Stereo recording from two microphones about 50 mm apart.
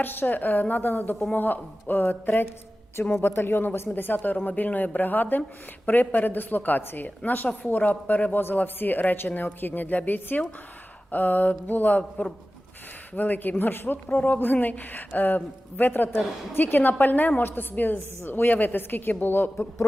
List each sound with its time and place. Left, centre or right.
0.0 s speech: left
3.1 s a woman's voice: left